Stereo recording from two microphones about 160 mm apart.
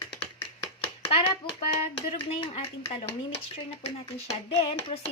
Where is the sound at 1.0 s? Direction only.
40° left (ahead or behind).